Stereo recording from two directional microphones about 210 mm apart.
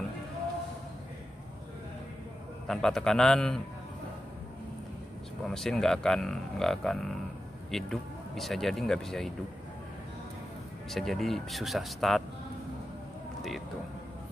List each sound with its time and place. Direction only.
2.7 s speech: centre (ahead or behind)
5.5 s speech: centre (ahead or behind)
10.9 s speech: centre (ahead or behind)